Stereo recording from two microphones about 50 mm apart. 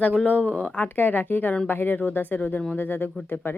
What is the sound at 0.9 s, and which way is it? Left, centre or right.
A woman's voice, left.